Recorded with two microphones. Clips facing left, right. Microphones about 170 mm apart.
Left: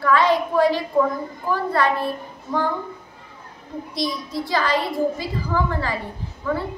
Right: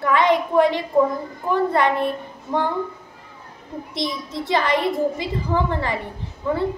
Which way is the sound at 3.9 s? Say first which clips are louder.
Left 1 dB; 20° right (ahead or behind).